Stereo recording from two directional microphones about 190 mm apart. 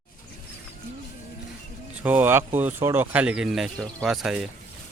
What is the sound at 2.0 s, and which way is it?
Speech, 10° right (ahead or behind).